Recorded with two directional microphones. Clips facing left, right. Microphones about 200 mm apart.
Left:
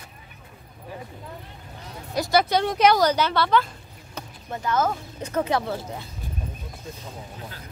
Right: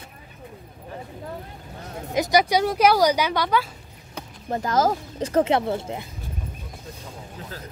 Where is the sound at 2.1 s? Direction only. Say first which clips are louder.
Right 1 dB; 15° right (ahead or behind).